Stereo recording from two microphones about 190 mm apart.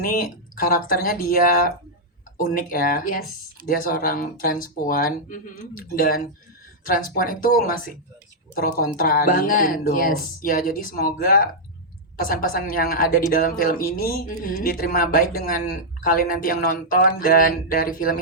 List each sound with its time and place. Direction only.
0.0 s speech: 45° left (ahead or behind)